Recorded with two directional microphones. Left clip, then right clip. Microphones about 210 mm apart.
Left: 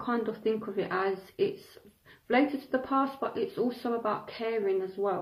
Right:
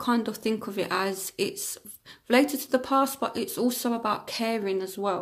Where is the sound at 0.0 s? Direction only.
50° right (ahead or behind).